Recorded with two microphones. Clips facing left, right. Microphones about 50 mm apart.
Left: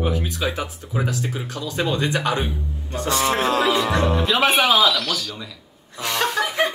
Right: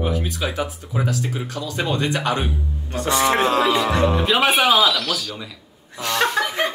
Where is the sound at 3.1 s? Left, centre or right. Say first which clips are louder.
Right 3 dB; right.